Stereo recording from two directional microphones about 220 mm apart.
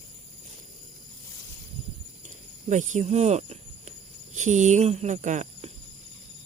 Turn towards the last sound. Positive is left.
turn(degrees=-30)  # may be behind; listen again after turning